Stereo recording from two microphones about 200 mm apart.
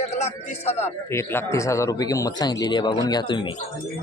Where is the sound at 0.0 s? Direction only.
30° left (ahead or behind).